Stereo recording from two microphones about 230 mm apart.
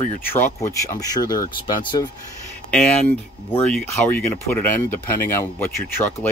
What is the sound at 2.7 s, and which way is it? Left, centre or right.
Speech, centre.